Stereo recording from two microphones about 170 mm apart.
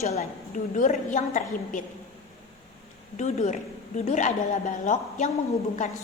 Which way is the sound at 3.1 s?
45° left (ahead or behind).